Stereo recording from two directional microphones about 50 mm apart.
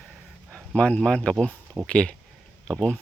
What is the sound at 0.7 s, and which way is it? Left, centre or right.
Speech, left.